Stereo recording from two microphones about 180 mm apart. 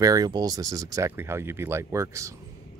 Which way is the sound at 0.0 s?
20° right (ahead or behind).